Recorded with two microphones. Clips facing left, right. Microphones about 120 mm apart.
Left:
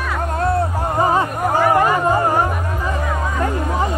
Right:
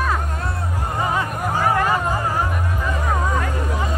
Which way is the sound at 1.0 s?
35° left (ahead or behind).